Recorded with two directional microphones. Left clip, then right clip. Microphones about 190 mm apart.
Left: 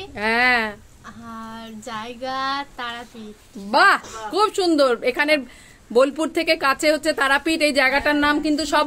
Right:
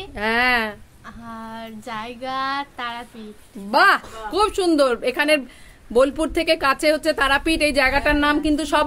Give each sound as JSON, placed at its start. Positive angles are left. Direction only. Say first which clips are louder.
{"t": 0.0, "sound": "a woman's voice", "louder": "left 1 dB", "side_deg": -5}